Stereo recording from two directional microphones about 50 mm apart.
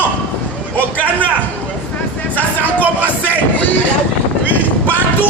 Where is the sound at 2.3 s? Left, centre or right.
Left.